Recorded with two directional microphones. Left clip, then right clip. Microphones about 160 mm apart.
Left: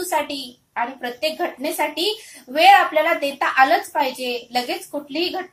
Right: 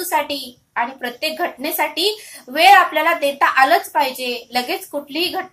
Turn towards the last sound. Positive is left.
turn(degrees=-20)  # may be behind; listen again after turning